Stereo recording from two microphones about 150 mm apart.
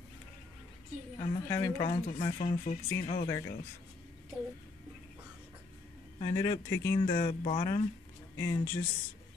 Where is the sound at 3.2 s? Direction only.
20° left (ahead or behind).